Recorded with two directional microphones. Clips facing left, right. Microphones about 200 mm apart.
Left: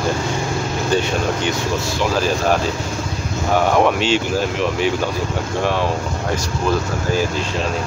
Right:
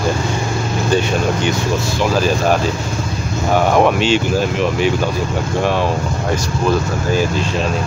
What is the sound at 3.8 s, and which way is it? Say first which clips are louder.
Speech: right 3 dB; 15° right (ahead or behind).